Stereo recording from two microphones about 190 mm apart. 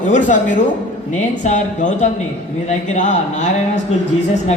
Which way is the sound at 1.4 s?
40° left (ahead or behind).